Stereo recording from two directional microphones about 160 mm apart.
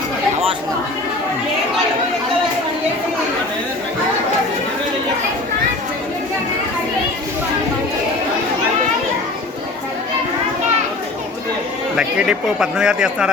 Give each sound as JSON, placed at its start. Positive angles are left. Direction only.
{"t": 11.9, "sound": "speech", "side_deg": -5}